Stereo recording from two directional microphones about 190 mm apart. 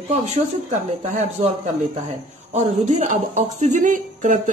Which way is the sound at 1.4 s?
35° right (ahead or behind).